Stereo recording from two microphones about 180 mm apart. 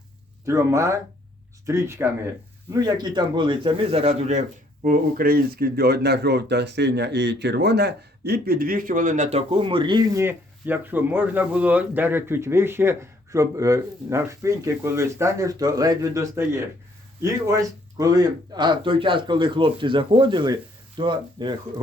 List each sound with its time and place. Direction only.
0.4 s speech: 15° right (ahead or behind)